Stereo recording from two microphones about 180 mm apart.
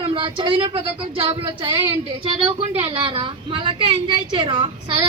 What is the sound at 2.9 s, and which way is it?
A woman's voice, 25° right (ahead or behind).